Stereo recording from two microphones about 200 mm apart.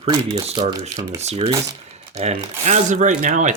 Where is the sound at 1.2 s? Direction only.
30° right (ahead or behind).